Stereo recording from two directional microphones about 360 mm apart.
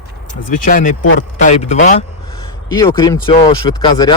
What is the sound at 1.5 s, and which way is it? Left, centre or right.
Speech, centre.